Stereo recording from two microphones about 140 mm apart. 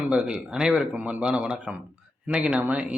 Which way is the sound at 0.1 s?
5° right (ahead or behind).